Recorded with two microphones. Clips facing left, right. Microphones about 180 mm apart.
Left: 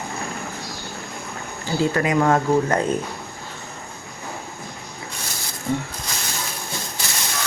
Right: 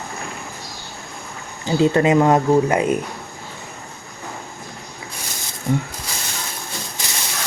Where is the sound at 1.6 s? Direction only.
25° right (ahead or behind).